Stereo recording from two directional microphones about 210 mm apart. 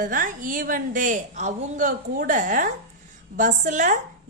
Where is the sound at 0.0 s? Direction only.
40° right (ahead or behind).